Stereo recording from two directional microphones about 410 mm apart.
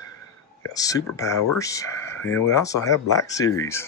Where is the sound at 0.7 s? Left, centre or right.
Centre.